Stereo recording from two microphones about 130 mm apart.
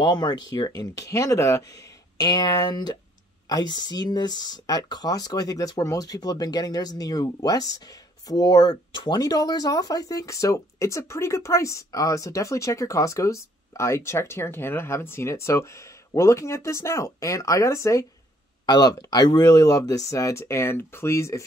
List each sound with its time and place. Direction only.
0.0 s speech: 35° left (ahead or behind)